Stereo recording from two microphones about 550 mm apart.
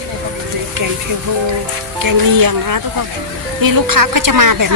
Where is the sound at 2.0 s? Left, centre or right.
Right.